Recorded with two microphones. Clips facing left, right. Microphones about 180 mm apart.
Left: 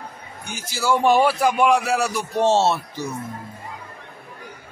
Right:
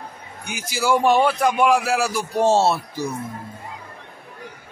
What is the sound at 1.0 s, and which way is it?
Speech, centre (ahead or behind).